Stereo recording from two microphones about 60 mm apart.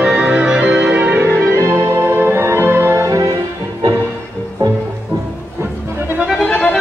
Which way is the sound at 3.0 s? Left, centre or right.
Right.